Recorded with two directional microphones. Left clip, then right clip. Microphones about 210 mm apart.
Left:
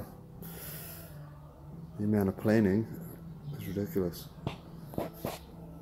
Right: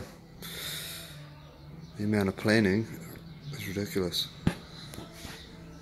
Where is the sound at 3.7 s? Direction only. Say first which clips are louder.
Right 2 dB; 15° right (ahead or behind).